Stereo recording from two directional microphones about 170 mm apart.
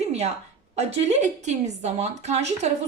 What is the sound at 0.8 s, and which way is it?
A woman's voice, 40° right (ahead or behind).